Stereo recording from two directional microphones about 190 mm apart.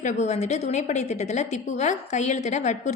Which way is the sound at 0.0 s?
35° left (ahead or behind).